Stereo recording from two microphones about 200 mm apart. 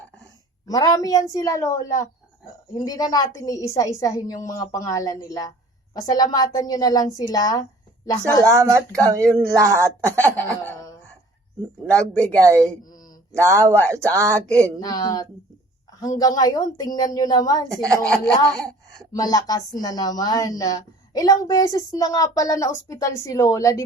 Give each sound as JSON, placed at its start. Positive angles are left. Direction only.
{"t": 0.7, "sound": "a woman's voice", "side_deg": 20}
{"t": 8.4, "sound": "speech", "side_deg": -15}
{"t": 10.5, "sound": "laughter", "side_deg": 10}
{"t": 11.9, "sound": "speech", "side_deg": 5}
{"t": 13.3, "sound": "speech", "side_deg": -15}
{"t": 14.8, "sound": "a woman's voice", "side_deg": 20}
{"t": 17.7, "sound": "speech", "side_deg": -15}
{"t": 19.1, "sound": "a woman's voice", "side_deg": 20}